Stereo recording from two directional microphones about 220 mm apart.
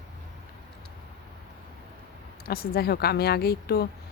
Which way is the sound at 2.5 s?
45° left (ahead or behind).